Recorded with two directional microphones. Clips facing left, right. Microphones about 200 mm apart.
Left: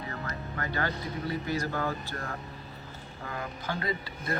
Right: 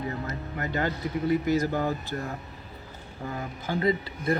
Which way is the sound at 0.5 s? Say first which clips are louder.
Right 4 dB; 20° right (ahead or behind).